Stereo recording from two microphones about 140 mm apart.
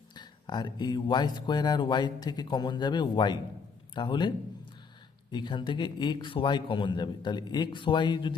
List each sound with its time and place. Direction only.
0.1 s speech: 30° left (ahead or behind)
5.3 s speech: 35° left (ahead or behind)